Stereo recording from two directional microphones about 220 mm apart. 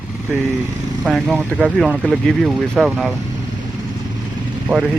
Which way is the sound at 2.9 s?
10° right (ahead or behind).